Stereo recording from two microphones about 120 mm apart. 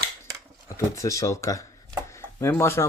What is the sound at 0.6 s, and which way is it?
Speech, 25° left (ahead or behind).